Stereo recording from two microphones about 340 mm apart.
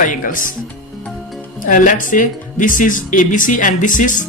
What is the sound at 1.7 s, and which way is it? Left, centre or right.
Speech, left.